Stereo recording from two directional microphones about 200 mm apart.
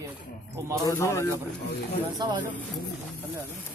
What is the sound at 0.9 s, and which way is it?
Speech, 15° left (ahead or behind).